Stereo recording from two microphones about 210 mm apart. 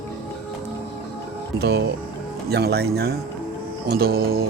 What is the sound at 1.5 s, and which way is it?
Speech, 50° right (ahead or behind).